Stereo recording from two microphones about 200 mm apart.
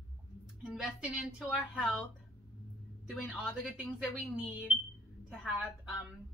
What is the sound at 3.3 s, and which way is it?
A woman's voice, centre (ahead or behind).